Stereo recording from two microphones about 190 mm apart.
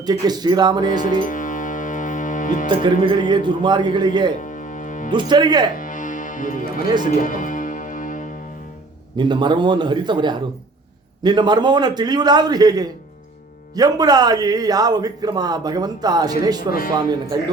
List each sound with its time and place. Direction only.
0.0 s a man's voice: 20° right (ahead or behind)
0.9 s music: 45° left (ahead or behind)
3.1 s a man's voice: 25° right (ahead or behind)
4.4 s music: 45° left (ahead or behind)
5.1 s a man's voice: 25° right (ahead or behind)
5.7 s music: 45° left (ahead or behind)
9.1 s a man's voice: 25° right (ahead or behind)
16.6 s speech: 50° left (ahead or behind)
16.9 s a man's voice: 20° right (ahead or behind)